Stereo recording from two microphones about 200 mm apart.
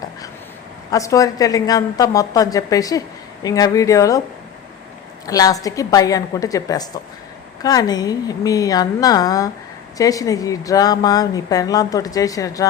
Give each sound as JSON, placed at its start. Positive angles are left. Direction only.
{"t": 0.9, "sound": "a woman's voice", "side_deg": 15}
{"t": 5.2, "sound": "a woman's voice", "side_deg": 20}